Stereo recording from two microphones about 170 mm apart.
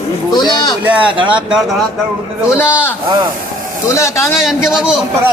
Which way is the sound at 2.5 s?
15° left (ahead or behind).